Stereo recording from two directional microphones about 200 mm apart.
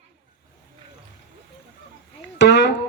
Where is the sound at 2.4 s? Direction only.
60° left (ahead or behind).